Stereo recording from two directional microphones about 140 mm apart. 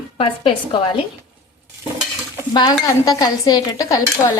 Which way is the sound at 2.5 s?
30° left (ahead or behind).